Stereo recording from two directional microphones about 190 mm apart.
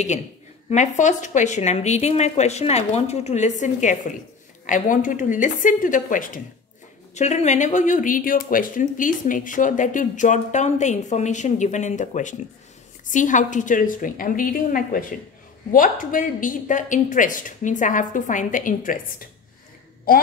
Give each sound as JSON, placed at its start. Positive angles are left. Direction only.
{"t": 0.7, "sound": "a woman's voice", "side_deg": 40}